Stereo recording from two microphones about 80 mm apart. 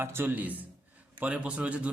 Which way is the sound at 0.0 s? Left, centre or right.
Right.